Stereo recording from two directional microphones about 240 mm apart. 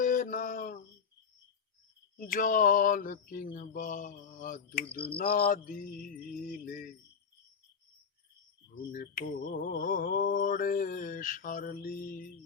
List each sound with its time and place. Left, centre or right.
0.0 s a sound: left
2.1 s mantra: left
8.9 s mantra: left